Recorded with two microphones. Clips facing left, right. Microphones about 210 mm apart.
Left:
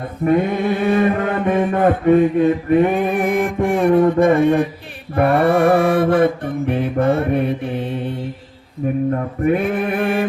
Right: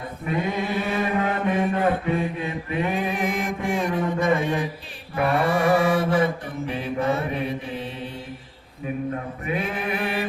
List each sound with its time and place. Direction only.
0.3 s mantra: 55° left (ahead or behind)
9.4 s mantra: 55° left (ahead or behind)